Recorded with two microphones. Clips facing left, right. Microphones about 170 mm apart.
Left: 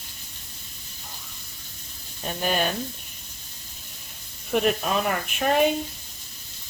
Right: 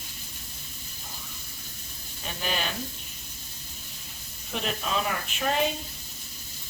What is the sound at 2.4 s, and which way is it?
Speech, 50° left (ahead or behind).